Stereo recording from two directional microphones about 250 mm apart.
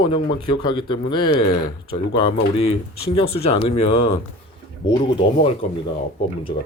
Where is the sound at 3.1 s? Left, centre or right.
Left.